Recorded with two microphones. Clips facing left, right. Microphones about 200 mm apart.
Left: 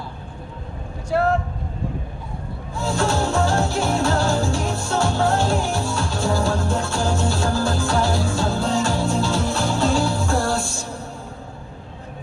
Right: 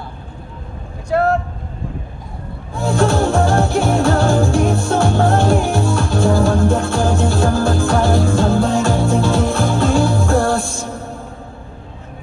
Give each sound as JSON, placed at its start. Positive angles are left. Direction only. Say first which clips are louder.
{"t": 1.1, "sound": "speech", "louder": "right 4 dB", "side_deg": -60}
{"t": 2.7, "sound": "music", "louder": "right 6 dB", "side_deg": -55}